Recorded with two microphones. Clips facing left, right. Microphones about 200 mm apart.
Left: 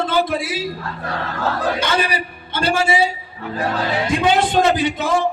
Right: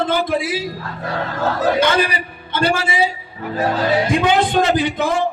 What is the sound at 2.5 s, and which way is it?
Speech, 55° right (ahead or behind).